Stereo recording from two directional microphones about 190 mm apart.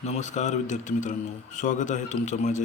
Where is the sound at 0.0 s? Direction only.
35° left (ahead or behind).